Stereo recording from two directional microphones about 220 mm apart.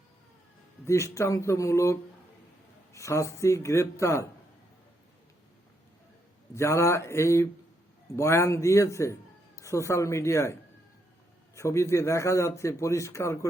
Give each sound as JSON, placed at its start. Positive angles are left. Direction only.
{"t": 0.9, "sound": "speech", "side_deg": 15}
{"t": 6.5, "sound": "speech", "side_deg": 10}